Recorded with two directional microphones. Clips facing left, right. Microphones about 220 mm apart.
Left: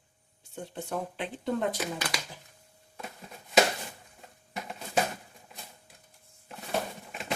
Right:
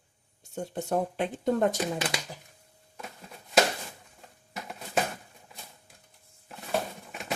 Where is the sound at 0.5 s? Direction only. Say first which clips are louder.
Right 6 dB; 45° right (ahead or behind).